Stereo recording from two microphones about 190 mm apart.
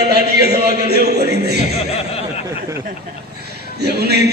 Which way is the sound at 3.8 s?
60° right (ahead or behind).